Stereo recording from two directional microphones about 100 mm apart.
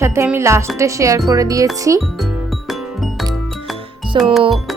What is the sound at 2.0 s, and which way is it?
Music, centre (ahead or behind).